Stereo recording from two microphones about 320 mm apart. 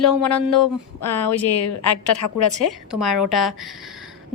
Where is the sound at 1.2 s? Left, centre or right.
Left.